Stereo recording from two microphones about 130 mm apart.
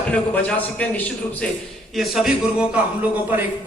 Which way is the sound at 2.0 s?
5° right (ahead or behind).